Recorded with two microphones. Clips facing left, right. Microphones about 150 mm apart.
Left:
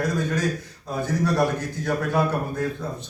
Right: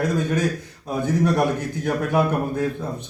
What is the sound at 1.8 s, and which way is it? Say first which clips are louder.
Speech: right 2 dB; 15° right (ahead or behind).